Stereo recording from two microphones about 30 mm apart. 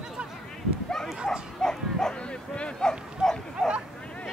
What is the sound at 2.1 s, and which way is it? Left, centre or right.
Speech, left.